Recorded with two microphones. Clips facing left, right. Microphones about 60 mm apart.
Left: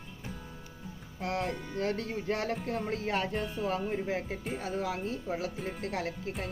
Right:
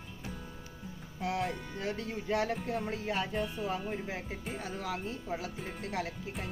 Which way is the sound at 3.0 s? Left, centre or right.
Left.